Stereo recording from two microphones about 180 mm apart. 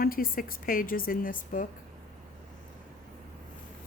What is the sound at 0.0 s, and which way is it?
Speech, 55° left (ahead or behind).